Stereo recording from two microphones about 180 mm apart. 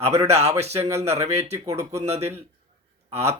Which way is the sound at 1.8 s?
35° right (ahead or behind).